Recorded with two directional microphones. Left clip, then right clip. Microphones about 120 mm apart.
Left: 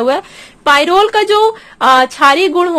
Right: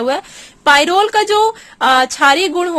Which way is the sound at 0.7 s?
30° right (ahead or behind).